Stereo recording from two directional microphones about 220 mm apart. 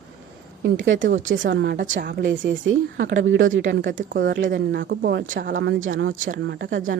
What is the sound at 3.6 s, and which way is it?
A woman's voice, 50° right (ahead or behind).